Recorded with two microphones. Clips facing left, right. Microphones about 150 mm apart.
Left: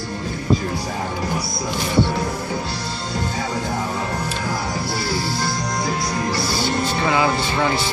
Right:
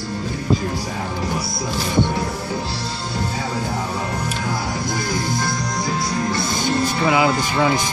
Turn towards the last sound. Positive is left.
turn(degrees=-15)  # may be behind; listen again after turning